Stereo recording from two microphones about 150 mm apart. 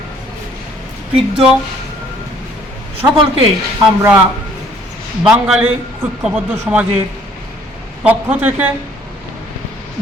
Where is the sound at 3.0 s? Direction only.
20° right (ahead or behind).